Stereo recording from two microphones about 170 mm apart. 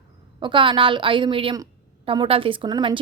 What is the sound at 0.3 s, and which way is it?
A woman's voice, 30° right (ahead or behind).